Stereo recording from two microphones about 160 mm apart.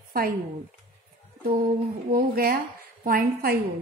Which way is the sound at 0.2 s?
70° right (ahead or behind).